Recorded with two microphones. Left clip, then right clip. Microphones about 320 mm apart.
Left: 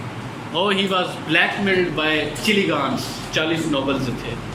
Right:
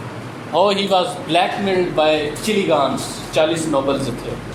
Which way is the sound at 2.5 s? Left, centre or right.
Right.